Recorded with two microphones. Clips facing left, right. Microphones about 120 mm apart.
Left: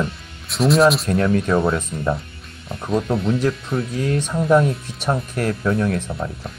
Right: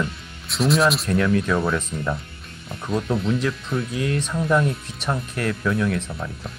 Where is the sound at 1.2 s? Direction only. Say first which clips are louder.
Left 2 dB; 35° left (ahead or behind).